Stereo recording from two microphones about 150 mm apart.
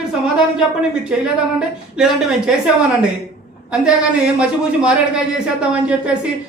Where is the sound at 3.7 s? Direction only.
5° right (ahead or behind).